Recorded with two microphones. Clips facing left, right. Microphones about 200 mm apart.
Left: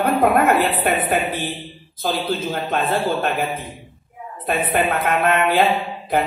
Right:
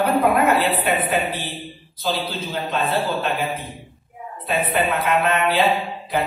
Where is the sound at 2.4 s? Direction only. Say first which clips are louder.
Left 3 dB; 50° left (ahead or behind).